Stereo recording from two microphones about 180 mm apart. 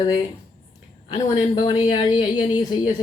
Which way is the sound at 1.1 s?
30° left (ahead or behind).